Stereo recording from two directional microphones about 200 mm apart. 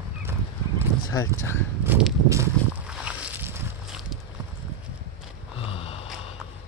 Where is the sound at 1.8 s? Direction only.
10° right (ahead or behind).